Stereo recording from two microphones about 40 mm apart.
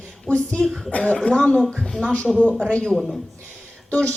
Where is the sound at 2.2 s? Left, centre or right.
Left.